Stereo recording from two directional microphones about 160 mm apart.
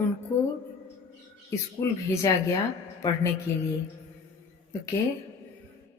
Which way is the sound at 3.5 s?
20° left (ahead or behind).